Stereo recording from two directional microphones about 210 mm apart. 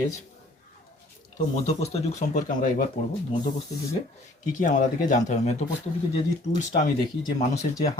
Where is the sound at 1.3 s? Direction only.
30° left (ahead or behind).